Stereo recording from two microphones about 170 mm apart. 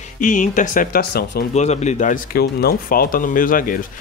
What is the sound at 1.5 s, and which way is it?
Speech, 40° left (ahead or behind).